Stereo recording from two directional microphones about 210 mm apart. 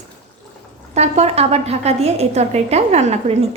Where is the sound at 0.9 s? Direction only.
30° right (ahead or behind).